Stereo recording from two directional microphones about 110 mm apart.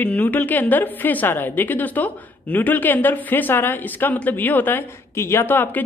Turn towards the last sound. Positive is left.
turn(degrees=20)  # may be behind; listen again after turning